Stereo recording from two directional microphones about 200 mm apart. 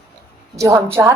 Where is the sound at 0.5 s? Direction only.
15° right (ahead or behind).